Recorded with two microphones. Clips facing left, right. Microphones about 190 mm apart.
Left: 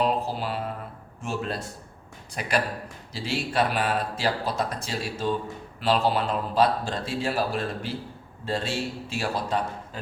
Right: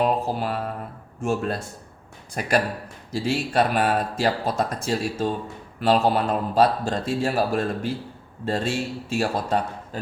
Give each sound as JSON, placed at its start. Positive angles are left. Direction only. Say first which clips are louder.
{"t": 0.0, "sound": "mantra", "louder": "right 3 dB", "side_deg": -50}
{"t": 1.2, "sound": "speech", "louder": "right 6 dB", "side_deg": -50}